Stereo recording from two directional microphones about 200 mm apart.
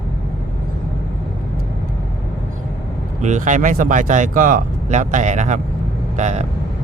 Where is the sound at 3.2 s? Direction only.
40° right (ahead or behind).